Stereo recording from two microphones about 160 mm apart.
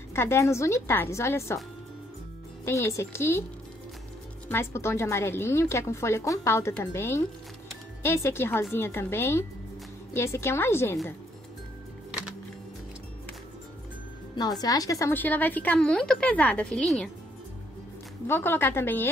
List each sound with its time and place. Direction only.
0.1 s a woman's voice: 15° left (ahead or behind)
2.6 s a woman's voice: 15° left (ahead or behind)
4.5 s a woman's voice: 15° left (ahead or behind)
14.3 s a woman's voice: 25° left (ahead or behind); by 17.1 s centre (ahead or behind)
18.2 s a woman's voice: 15° left (ahead or behind)